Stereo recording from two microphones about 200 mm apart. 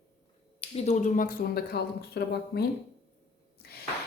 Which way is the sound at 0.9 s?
40° left (ahead or behind).